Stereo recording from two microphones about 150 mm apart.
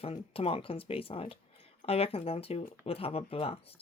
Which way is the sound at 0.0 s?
40° left (ahead or behind).